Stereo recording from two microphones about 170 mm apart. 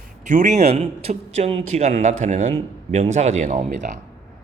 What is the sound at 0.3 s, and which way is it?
Speech, 45° right (ahead or behind).